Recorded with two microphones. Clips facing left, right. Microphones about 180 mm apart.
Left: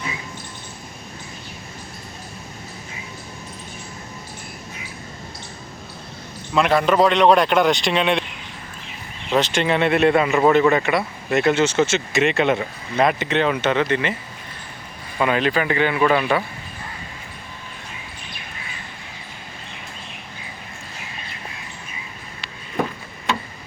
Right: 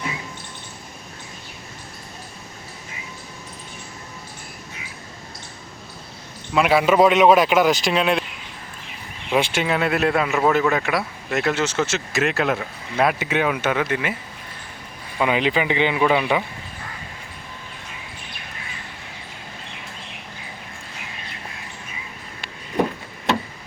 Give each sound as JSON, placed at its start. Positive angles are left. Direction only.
{"t": 6.5, "sound": "speech", "side_deg": -5}
{"t": 9.3, "sound": "speech", "side_deg": -10}
{"t": 15.2, "sound": "speech", "side_deg": -15}